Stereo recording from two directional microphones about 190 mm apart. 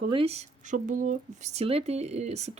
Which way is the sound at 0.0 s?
30° right (ahead or behind).